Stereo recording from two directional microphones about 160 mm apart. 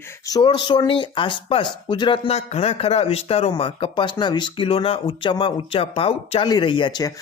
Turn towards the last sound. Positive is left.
turn(degrees=25)  # may be behind; listen again after turning